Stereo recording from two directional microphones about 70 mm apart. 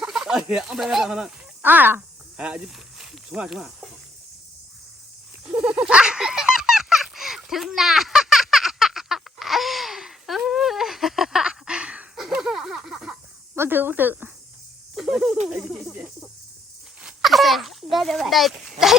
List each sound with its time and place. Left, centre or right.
0.1 s speech: centre
1.6 s speech: right
2.4 s speech: centre
5.5 s goat: right
5.8 s a sound: centre
13.6 s speech: right
14.9 s a sound: centre
17.2 s a child's voice: centre